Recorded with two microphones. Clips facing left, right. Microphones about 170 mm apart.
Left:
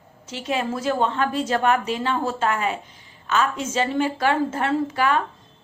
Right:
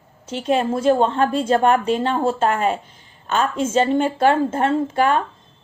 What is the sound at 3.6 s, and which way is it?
A woman's voice, 30° right (ahead or behind).